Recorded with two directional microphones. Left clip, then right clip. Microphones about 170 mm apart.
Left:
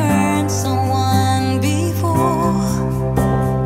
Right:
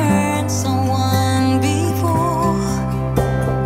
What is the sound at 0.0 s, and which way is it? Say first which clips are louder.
Music: left 1 dB; centre (ahead or behind).